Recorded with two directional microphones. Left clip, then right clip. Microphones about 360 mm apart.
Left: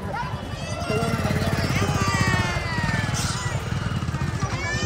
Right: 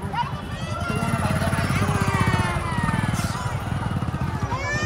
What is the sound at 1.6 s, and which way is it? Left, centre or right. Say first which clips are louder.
Vehicle: even; centre.